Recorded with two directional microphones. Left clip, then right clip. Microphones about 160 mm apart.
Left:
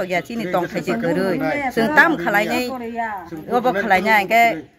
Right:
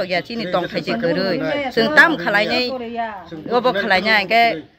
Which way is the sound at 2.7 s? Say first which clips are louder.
Even; 45° right (ahead or behind).